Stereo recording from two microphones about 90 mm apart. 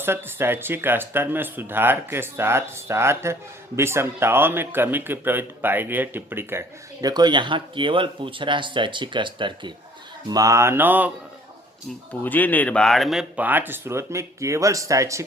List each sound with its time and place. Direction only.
0.0 s speech: 25° right (ahead or behind)
7.0 s speech: 50° right (ahead or behind)
10.2 s speech: 40° right (ahead or behind); by 11.1 s 20° right (ahead or behind)
12.2 s speech: 20° left (ahead or behind); by 13.2 s centre (ahead or behind)
13.3 s speech: 20° right (ahead or behind); by 15.2 s 35° right (ahead or behind)